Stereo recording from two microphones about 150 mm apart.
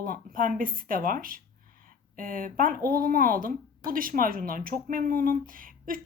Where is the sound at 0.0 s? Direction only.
70° right (ahead or behind).